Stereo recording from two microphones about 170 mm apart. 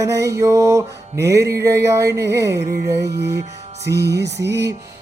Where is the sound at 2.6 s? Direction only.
65° right (ahead or behind).